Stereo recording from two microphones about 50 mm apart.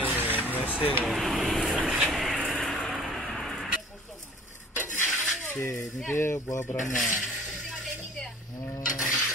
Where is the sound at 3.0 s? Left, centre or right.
Centre.